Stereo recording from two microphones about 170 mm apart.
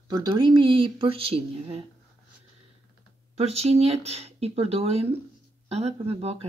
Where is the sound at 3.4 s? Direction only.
40° right (ahead or behind).